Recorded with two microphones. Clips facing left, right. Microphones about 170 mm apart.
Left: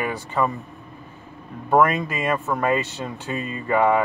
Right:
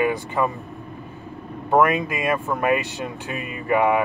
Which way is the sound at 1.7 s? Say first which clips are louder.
Even; 15° right (ahead or behind).